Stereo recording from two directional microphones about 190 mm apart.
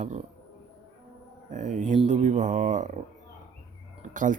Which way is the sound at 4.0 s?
45° right (ahead or behind).